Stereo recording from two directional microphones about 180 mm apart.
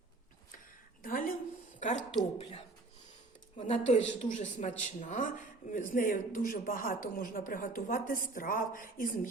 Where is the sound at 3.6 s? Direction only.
40° left (ahead or behind).